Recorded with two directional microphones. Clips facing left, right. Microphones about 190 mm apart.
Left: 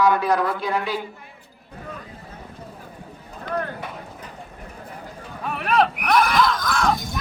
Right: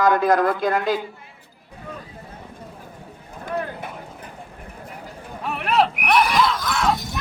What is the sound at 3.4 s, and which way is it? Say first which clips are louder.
Clip-clop: even; 10° right (ahead or behind).